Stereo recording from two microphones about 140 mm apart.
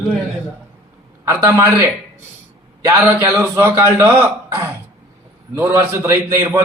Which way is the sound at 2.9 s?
25° right (ahead or behind).